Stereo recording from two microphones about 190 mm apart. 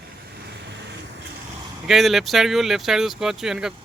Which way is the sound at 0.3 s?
60° right (ahead or behind).